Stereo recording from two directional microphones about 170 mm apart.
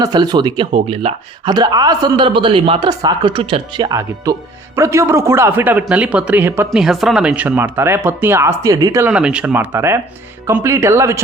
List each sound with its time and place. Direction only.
0.0 s speech: 25° right (ahead or behind)